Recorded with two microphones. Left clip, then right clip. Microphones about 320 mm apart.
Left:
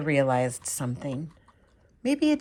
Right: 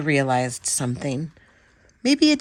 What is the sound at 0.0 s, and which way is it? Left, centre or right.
Speech, centre.